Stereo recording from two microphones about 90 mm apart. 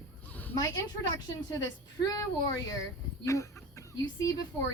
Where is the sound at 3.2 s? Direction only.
35° left (ahead or behind).